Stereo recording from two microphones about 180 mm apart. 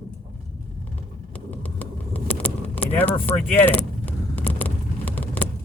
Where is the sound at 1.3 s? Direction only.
10° left (ahead or behind).